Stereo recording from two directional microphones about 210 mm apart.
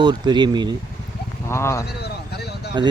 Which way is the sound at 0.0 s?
20° right (ahead or behind).